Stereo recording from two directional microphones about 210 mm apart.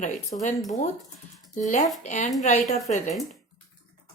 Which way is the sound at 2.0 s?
35° left (ahead or behind).